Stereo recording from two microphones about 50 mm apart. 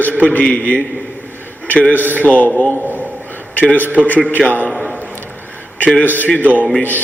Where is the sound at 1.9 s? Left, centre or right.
Left.